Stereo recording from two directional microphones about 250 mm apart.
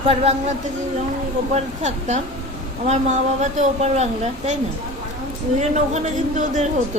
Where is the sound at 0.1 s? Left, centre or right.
Right.